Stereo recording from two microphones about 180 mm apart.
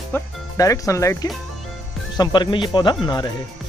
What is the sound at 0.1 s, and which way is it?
Speech, 20° left (ahead or behind).